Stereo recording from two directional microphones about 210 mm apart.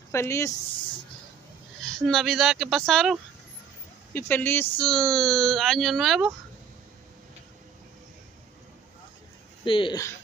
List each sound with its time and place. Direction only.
0.1 s speech: 15° left (ahead or behind)
1.9 s speech: 5° left (ahead or behind)
9.7 s speech: 25° left (ahead or behind)